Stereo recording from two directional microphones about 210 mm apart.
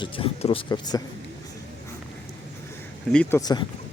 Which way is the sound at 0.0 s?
25° left (ahead or behind).